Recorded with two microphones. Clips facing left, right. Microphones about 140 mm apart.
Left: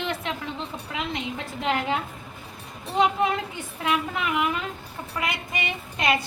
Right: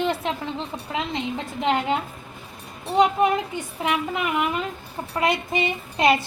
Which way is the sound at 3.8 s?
20° right (ahead or behind).